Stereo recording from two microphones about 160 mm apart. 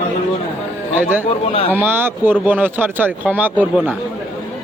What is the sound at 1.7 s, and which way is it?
Speech, 15° right (ahead or behind).